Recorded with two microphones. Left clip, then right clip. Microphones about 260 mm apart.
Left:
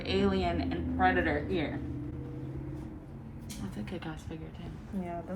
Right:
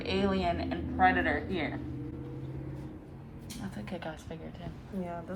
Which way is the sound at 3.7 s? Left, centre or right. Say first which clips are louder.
Right 2 dB; right.